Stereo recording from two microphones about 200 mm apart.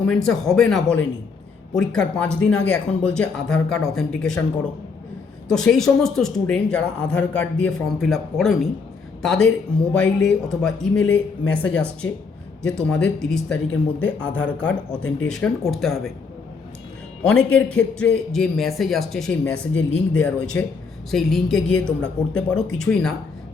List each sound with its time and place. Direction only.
0.0 s a man's voice: 5° left (ahead or behind)
5.5 s a man's voice: 5° left (ahead or behind)
17.2 s a man's voice: 5° left (ahead or behind)